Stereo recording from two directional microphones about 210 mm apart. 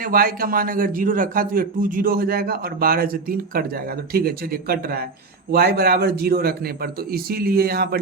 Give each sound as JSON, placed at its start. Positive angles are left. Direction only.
{"t": 0.0, "sound": "a man's voice", "side_deg": -45}